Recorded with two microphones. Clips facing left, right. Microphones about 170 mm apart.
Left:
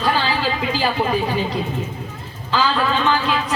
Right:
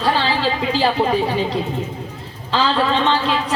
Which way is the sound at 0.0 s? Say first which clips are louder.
Right 2 dB; 30° right (ahead or behind).